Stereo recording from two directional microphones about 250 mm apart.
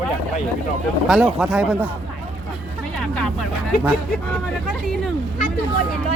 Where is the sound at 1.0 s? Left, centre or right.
Centre.